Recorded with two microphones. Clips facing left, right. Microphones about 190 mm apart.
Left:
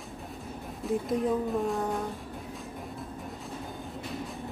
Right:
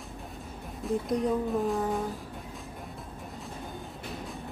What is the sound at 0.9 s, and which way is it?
Speech, centre (ahead or behind).